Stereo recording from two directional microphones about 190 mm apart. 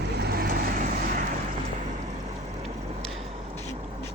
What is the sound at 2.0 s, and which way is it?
Vehicle, 40° right (ahead or behind).